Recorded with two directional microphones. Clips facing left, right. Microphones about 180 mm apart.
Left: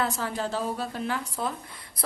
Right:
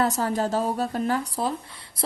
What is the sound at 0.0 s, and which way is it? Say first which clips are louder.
A woman's voice: right 5 dB; 40° right (ahead or behind).